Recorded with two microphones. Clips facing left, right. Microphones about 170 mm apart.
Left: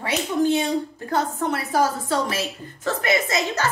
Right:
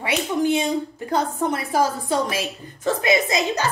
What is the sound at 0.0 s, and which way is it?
A woman's voice, 15° right (ahead or behind).